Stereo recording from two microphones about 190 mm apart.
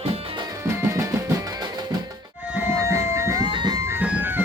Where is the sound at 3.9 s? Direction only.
10° right (ahead or behind).